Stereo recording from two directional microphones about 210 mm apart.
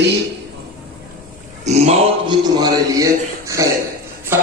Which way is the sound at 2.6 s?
15° right (ahead or behind).